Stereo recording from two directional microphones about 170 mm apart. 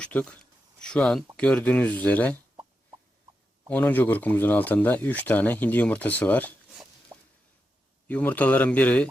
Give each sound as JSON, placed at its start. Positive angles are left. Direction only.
{"t": 0.0, "sound": "speech", "side_deg": 10}
{"t": 3.7, "sound": "speech", "side_deg": 10}
{"t": 7.1, "sound": "a sound", "side_deg": -15}
{"t": 8.0, "sound": "speech", "side_deg": 10}